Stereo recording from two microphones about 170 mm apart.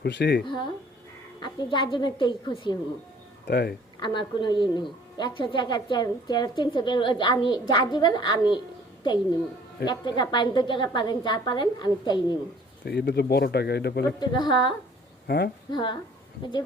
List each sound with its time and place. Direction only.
0.0 s speech: 90° left
0.4 s a woman's voice: 30° left (ahead or behind)
3.4 s speech: 80° left
4.0 s a woman's voice: 25° left (ahead or behind)
9.8 s a woman's voice: 25° left (ahead or behind)
12.8 s speech: 85° left
14.2 s a woman's voice: 25° left (ahead or behind)
15.3 s speech: 65° left (ahead or behind)
15.7 s a woman's voice: 25° left (ahead or behind)